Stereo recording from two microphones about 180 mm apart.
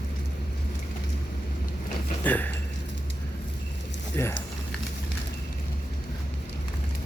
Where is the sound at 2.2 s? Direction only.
10° left (ahead or behind).